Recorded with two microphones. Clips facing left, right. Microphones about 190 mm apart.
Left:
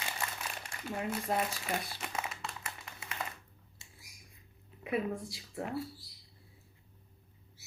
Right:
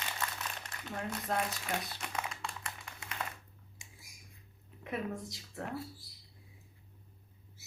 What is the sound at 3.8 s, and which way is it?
Finger snapping, 15° right (ahead or behind).